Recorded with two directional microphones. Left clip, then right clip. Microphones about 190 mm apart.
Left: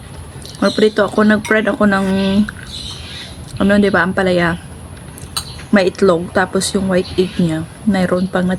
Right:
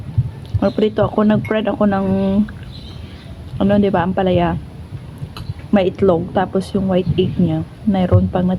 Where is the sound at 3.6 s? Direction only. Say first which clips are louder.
Left 3 dB; 25° left (ahead or behind).